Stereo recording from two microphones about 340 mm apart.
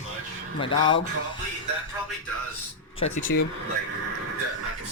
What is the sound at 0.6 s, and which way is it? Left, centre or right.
Speech, centre.